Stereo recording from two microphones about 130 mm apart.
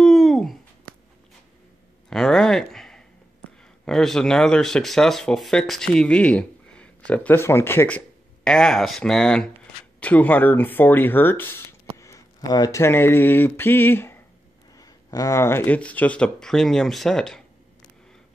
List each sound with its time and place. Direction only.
0.0 s a sound: centre (ahead or behind)
2.0 s speech: 5° left (ahead or behind)
8.5 s speech: 5° left (ahead or behind)
12.0 s speech: 25° left (ahead or behind)
14.8 s speech: 30° left (ahead or behind); by 17.4 s 5° left (ahead or behind)